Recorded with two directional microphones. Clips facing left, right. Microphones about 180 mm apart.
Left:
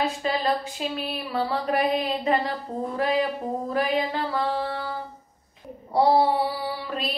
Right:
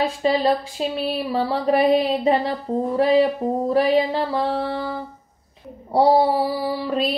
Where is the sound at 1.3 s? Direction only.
30° right (ahead or behind).